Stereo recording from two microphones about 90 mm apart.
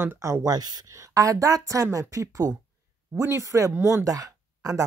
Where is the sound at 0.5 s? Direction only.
50° right (ahead or behind).